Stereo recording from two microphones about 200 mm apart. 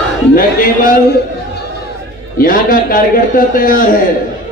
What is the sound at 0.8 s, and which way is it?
Speech, 45° left (ahead or behind).